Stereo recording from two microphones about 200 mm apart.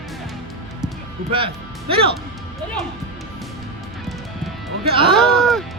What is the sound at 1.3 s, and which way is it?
Speech, 25° right (ahead or behind).